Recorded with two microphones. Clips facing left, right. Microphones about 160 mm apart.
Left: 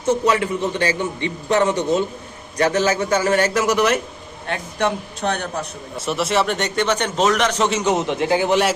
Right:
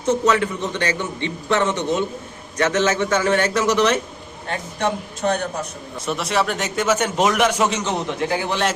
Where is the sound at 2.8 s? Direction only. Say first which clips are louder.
Left 1 dB; 35° left (ahead or behind).